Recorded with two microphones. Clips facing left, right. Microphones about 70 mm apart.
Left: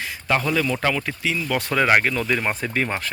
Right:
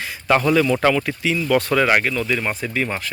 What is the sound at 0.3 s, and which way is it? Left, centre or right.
Speech, centre.